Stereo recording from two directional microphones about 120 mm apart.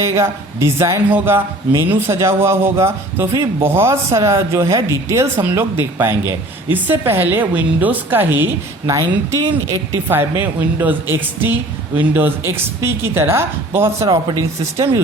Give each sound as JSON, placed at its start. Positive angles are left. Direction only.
{"t": 0.0, "sound": "speech", "side_deg": -25}
{"t": 8.9, "sound": "speech", "side_deg": -25}